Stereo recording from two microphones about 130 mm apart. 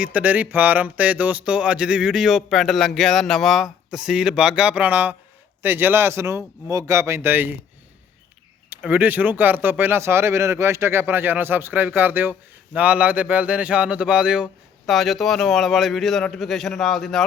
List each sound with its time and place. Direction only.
0.0 s music: 10° right (ahead or behind)
5.6 s speech: 15° right (ahead or behind)
8.7 s speech: 15° right (ahead or behind)
9.4 s music: 15° right (ahead or behind)
14.4 s a man's voice: centre (ahead or behind)